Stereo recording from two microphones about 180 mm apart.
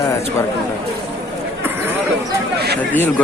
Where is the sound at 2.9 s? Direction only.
10° left (ahead or behind).